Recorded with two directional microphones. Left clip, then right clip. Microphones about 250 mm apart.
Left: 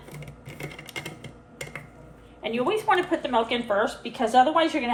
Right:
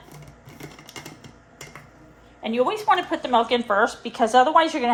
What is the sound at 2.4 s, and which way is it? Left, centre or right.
A woman's voice, right.